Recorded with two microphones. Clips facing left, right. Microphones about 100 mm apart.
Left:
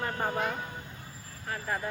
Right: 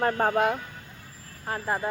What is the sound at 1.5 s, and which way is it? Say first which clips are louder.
Speech: right 5 dB; 35° right (ahead or behind).